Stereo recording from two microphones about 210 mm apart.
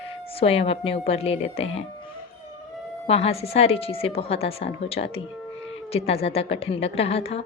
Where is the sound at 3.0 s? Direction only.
30° left (ahead or behind).